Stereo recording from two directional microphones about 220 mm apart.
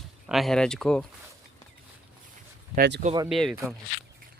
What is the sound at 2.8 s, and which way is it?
Speech, 50° right (ahead or behind).